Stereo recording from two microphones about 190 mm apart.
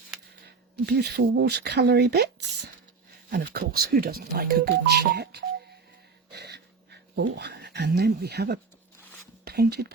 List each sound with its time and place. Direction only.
0.4 s speech: 60° right (ahead or behind)
6.3 s a sound: 60° right (ahead or behind)
7.2 s speech: 65° right (ahead or behind)